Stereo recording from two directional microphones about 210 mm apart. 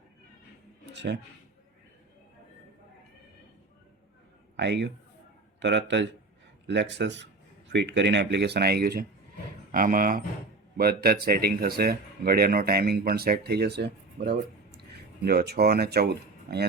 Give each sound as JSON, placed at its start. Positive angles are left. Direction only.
{"t": 0.9, "sound": "speech", "side_deg": -55}
{"t": 4.5, "sound": "a man's voice", "side_deg": -55}